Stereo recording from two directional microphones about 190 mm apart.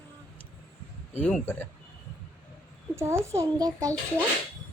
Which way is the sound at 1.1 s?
10° left (ahead or behind).